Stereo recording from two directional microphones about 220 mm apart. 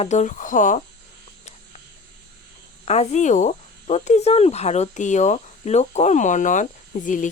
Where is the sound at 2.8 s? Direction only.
30° left (ahead or behind).